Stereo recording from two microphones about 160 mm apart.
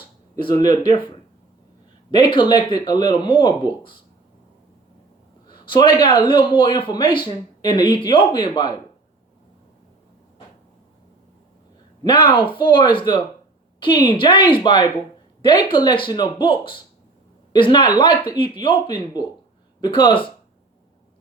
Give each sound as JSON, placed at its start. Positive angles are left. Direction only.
{"t": 0.3, "sound": "a man's voice", "side_deg": 30}
{"t": 2.0, "sound": "speech", "side_deg": 30}
{"t": 5.5, "sound": "a man's voice", "side_deg": 30}
{"t": 12.0, "sound": "a man's voice", "side_deg": 30}